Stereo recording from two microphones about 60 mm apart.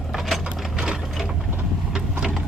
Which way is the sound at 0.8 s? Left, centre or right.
Centre.